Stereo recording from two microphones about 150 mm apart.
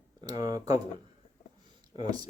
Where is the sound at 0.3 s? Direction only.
25° right (ahead or behind).